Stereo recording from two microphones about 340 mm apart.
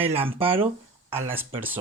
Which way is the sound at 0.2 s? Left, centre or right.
Centre.